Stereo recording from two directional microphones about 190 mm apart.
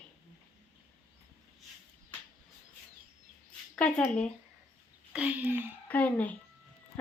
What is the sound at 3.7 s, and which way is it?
Speech, 5° left (ahead or behind).